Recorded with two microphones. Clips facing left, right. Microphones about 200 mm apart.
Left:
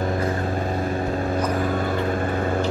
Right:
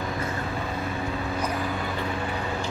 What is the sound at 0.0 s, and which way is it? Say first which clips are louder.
Vehicle: left 6 dB; 45° left (ahead or behind).